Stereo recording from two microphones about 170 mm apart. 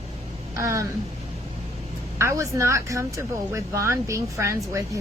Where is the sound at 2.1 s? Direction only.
15° right (ahead or behind).